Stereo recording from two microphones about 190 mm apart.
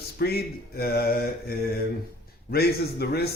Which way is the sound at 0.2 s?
55° left (ahead or behind).